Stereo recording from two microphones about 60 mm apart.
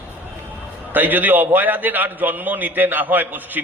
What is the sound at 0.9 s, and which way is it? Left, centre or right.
A man's voice, right.